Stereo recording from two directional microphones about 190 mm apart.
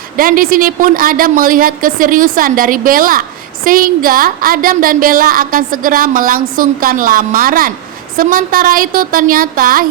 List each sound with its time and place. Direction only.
0.2 s a woman's voice: 50° right (ahead or behind)